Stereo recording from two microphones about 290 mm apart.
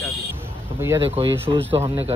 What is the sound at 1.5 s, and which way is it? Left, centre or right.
Speech, centre.